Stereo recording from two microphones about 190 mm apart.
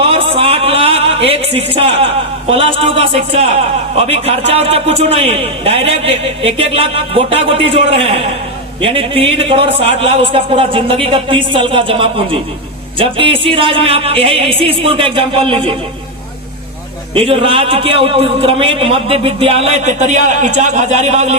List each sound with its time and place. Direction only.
0.0 s a sound: 30° right (ahead or behind)
2.5 s a man's voice: 30° right (ahead or behind)
8.8 s a man's voice: 30° right (ahead or behind)
17.2 s a man's voice: 30° right (ahead or behind)